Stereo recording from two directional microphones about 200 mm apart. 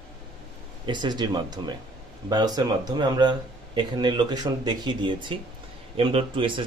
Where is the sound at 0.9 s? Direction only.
20° right (ahead or behind).